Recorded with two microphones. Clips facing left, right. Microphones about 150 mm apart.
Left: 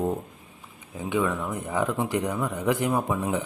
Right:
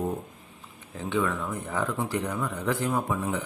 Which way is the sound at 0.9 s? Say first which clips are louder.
Left 2 dB; 15° left (ahead or behind).